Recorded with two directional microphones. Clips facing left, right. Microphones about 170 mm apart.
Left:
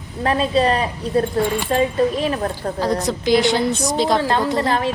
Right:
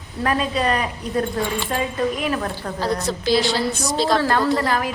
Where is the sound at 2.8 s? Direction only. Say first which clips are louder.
Left 2 dB; 15° left (ahead or behind).